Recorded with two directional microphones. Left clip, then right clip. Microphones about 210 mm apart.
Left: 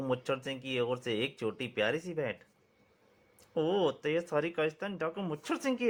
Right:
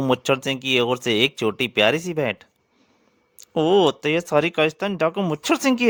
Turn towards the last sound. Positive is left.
turn(degrees=-50)  # may be behind; listen again after turning